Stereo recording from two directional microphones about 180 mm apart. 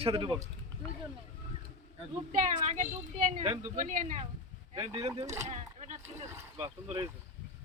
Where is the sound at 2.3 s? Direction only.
40° right (ahead or behind).